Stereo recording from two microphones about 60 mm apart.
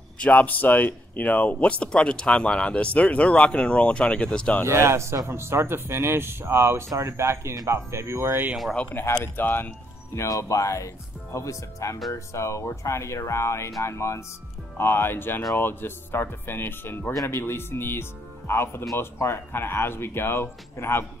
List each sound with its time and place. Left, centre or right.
0.2 s speech: left
4.6 s speech: right
6.9 s speech: right
8.9 s speech: left
10.1 s speech: left
14.8 s speech: left